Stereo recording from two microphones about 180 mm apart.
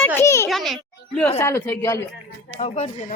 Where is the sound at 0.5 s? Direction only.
Centre (ahead or behind).